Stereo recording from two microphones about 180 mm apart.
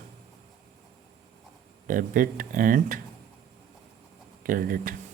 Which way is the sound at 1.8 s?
50° right (ahead or behind).